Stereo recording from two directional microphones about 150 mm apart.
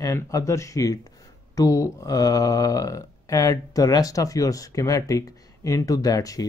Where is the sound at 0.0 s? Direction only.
20° left (ahead or behind).